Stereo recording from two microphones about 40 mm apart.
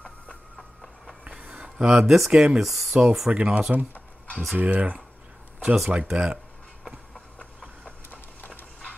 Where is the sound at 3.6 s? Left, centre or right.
Right.